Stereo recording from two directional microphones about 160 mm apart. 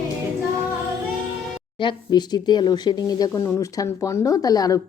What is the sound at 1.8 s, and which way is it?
Speech, 25° left (ahead or behind).